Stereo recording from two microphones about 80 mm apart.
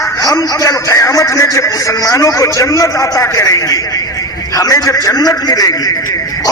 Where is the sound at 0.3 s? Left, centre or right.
Left.